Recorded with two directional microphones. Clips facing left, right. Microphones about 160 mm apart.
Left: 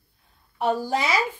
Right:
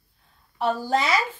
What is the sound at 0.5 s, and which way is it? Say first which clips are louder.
Speech: even; 15° left (ahead or behind).